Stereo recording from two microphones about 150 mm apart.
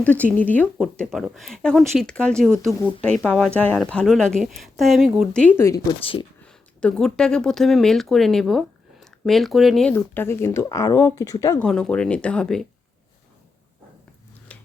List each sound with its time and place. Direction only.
0.0 s speech: 10° left (ahead or behind)
5.4 s speech: 15° left (ahead or behind)
6.0 s speech: 35° left (ahead or behind)
6.4 s speech: 5° left (ahead or behind)
9.9 s speech: 15° left (ahead or behind)
11.6 s speech: 5° left (ahead or behind)